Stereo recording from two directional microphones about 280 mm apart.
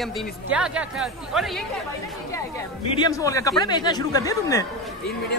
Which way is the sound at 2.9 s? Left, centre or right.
Centre.